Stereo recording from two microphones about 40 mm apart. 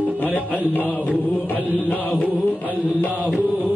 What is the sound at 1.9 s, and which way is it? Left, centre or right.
Speech, left.